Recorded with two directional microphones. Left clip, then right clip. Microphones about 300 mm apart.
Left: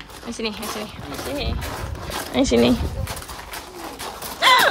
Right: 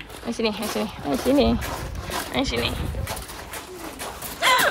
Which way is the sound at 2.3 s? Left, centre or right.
Left.